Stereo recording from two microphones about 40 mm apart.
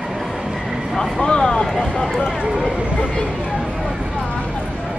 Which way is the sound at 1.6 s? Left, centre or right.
Centre.